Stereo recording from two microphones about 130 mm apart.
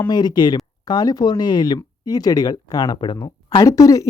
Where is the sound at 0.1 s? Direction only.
35° left (ahead or behind).